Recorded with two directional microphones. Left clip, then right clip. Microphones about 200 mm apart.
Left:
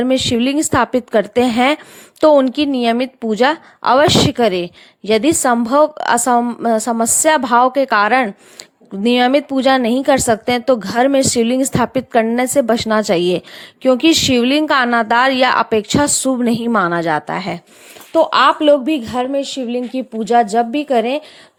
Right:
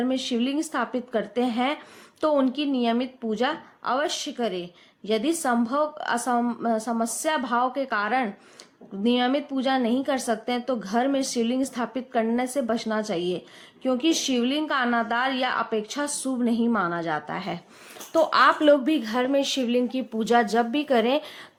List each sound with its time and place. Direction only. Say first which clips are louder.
0.0 s a woman's voice: left 11 dB; 45° left (ahead or behind); by 21.2 s 25° left (ahead or behind)